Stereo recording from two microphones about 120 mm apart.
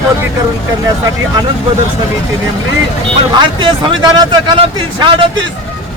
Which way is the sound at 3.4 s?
40° right (ahead or behind).